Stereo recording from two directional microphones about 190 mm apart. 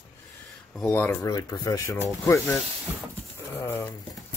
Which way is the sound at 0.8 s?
15° left (ahead or behind).